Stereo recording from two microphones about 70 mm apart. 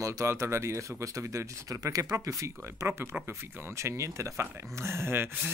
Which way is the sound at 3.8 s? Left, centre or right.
Right.